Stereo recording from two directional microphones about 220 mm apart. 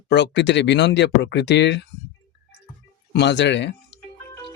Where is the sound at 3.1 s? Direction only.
50° left (ahead or behind).